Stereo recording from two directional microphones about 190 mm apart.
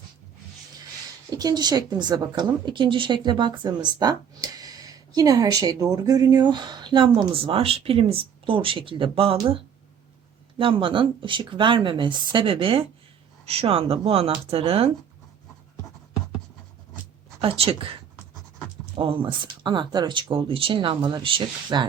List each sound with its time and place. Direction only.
1.3 s a woman's voice: 20° right (ahead or behind)
10.6 s a woman's voice: 25° right (ahead or behind)
17.4 s a woman's voice: 30° right (ahead or behind)
18.9 s a woman's voice: 25° right (ahead or behind)